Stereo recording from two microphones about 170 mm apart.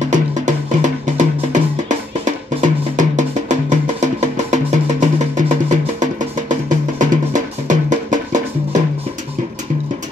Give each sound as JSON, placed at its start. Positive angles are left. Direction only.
{"t": 0.0, "sound": "music", "side_deg": -45}